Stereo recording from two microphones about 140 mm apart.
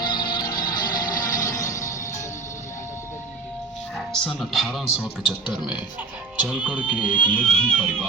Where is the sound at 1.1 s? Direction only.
70° left (ahead or behind).